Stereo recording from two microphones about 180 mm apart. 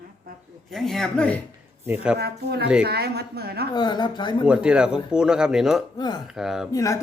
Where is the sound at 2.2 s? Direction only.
65° right (ahead or behind).